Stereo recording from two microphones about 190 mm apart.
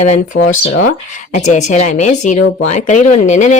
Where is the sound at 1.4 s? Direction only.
40° left (ahead or behind).